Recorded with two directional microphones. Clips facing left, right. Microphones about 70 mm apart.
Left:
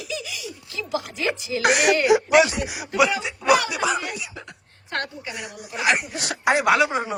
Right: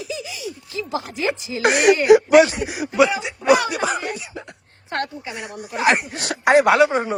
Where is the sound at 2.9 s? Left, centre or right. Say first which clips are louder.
Right 3 dB; centre.